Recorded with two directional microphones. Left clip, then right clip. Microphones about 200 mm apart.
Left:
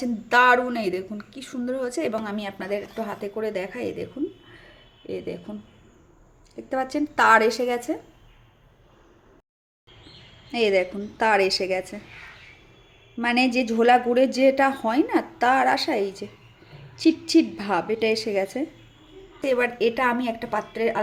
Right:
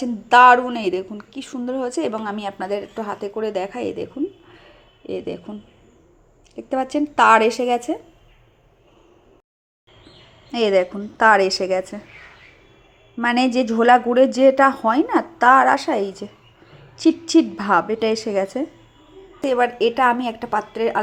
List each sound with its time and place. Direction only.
0.0 s a woman's voice: 10° right (ahead or behind)
4.5 s a sound: 10° right (ahead or behind)
6.6 s a woman's voice: 10° right (ahead or behind)
10.8 s a woman's voice: 5° right (ahead or behind)
13.2 s a woman's voice: 10° right (ahead or behind)